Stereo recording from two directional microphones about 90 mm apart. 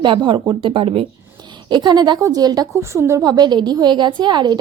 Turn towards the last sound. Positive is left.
turn(degrees=-55)  # may be behind; listen again after turning